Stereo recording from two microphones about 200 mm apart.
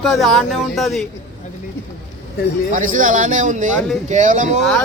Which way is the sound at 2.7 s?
40° right (ahead or behind).